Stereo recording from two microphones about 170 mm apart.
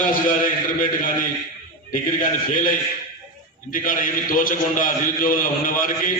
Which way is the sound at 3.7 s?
50° left (ahead or behind).